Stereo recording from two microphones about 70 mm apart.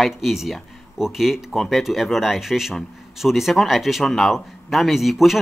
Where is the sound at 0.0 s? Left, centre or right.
Centre.